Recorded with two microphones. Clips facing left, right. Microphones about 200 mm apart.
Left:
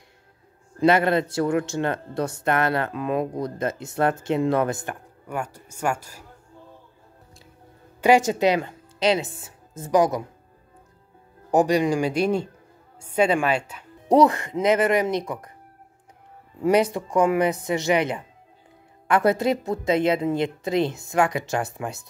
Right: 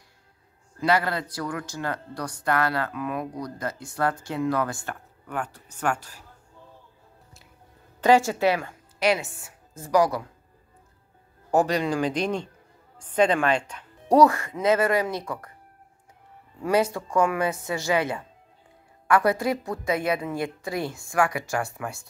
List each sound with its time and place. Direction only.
0.7 s speech: 25° left (ahead or behind)
5.3 s speech: 10° left (ahead or behind)
8.0 s a woman's voice: 15° left (ahead or behind)
11.5 s speech: 15° left (ahead or behind)
14.0 s speech: 20° left (ahead or behind)
16.6 s speech: 20° left (ahead or behind)